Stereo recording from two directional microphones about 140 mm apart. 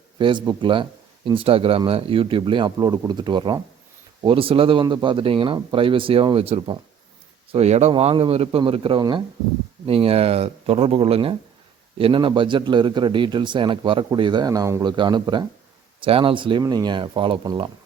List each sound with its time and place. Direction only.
0.2 s a man's voice: 35° right (ahead or behind)